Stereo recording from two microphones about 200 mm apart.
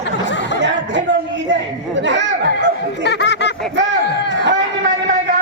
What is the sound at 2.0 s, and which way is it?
Speech, 65° right (ahead or behind).